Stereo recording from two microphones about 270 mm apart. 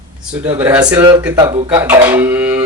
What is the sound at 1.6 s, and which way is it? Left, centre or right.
Speech, centre.